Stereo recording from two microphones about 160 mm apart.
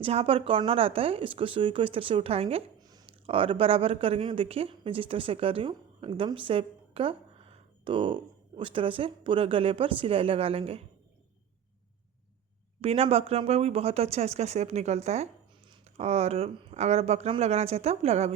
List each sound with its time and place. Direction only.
0.0 s speech: 40° right (ahead or behind)
2.8 s speech: 25° right (ahead or behind)
12.8 s speech: 40° right (ahead or behind)